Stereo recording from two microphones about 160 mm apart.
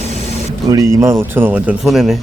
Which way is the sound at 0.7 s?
20° right (ahead or behind).